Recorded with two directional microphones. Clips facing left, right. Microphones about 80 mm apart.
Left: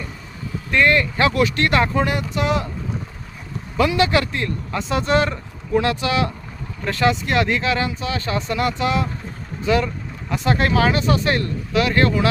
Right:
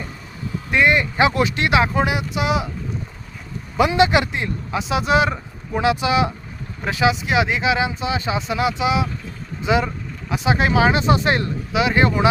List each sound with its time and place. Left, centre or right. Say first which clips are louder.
0.7 s speech: even; centre
3.8 s speech: right 2 dB; right
4.8 s speech: right 1 dB; centre